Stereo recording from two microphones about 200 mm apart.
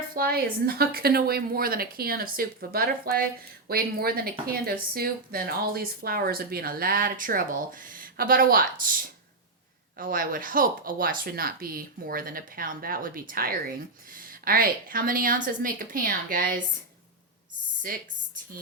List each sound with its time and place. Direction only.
0.1 s speech: 50° right (ahead or behind)
17.9 s speech: 45° right (ahead or behind)